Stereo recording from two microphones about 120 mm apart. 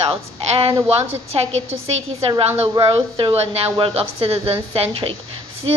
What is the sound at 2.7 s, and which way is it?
A woman's voice, 45° right (ahead or behind).